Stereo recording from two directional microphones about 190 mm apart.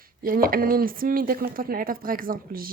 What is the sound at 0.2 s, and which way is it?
Speech, 50° right (ahead or behind).